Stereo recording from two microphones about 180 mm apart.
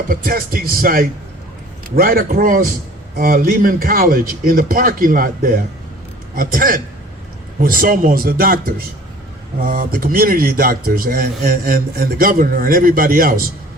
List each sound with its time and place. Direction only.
0.1 s speech: 55° right (ahead or behind)